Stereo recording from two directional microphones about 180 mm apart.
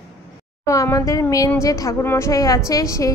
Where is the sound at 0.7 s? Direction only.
20° left (ahead or behind).